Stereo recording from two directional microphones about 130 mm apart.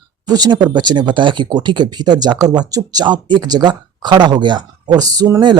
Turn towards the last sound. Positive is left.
turn(degrees=-30)  # may be behind; listen again after turning